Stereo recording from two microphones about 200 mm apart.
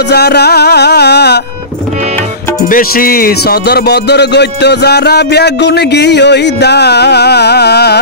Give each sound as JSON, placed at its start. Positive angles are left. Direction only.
{"t": 0.1, "sound": "music", "side_deg": 55}
{"t": 2.7, "sound": "a man's voice", "side_deg": 45}